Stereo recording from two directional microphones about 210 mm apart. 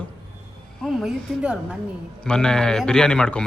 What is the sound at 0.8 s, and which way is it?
A woman's voice, centre (ahead or behind).